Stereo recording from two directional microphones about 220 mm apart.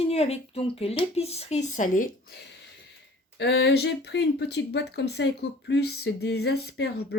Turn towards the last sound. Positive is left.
turn(degrees=50)  # may be behind; listen again after turning